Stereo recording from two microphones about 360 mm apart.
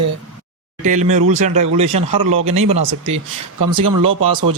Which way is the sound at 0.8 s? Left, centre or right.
Right.